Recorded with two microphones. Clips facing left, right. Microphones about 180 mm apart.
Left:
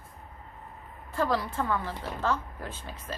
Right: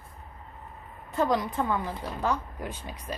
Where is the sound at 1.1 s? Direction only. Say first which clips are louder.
Right 2 dB; 20° right (ahead or behind).